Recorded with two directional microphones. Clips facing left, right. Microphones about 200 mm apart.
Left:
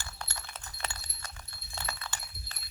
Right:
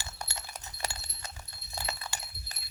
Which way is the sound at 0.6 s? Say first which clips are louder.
Right 3 dB; 20° right (ahead or behind).